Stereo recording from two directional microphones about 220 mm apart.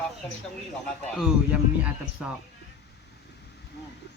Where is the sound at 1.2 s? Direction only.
5° right (ahead or behind).